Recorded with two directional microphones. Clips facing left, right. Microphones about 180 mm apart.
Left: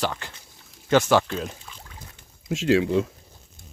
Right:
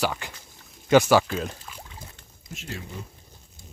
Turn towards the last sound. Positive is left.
turn(degrees=90)